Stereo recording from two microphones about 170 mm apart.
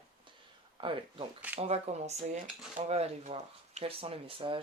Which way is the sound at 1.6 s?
40° right (ahead or behind).